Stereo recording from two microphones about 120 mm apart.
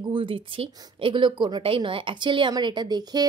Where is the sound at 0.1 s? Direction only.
45° right (ahead or behind).